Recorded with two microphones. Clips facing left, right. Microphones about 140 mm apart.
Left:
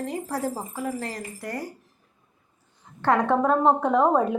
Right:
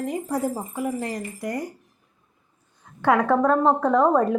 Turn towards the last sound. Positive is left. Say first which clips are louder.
# right 2 dB
turn(degrees=5)  # may be behind; listen again after turning